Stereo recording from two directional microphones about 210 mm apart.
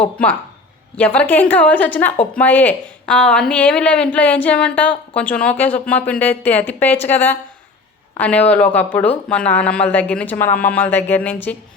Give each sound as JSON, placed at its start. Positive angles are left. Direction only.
{"t": 0.0, "sound": "speech", "side_deg": 10}